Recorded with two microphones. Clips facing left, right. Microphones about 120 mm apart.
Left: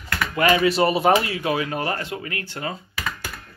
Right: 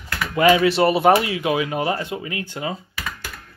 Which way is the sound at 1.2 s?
10° right (ahead or behind).